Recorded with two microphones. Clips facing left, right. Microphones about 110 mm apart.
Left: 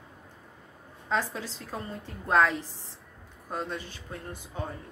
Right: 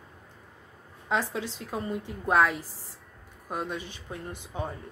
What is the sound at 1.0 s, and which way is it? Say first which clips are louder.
A woman's voice: right 1 dB; 15° right (ahead or behind).